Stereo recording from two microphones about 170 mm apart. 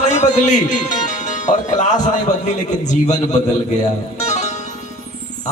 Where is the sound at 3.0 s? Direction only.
45° left (ahead or behind).